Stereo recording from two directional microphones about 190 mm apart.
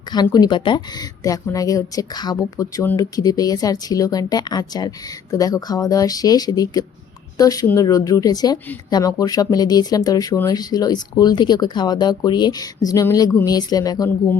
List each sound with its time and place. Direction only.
0.1 s speech: 20° left (ahead or behind)